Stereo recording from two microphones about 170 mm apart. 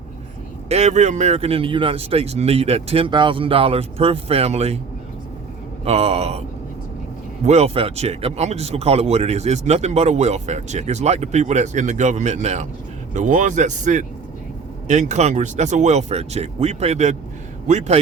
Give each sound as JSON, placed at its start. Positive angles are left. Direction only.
{"t": 0.7, "sound": "speech", "side_deg": -40}
{"t": 5.8, "sound": "speech", "side_deg": -35}
{"t": 7.4, "sound": "speech", "side_deg": -40}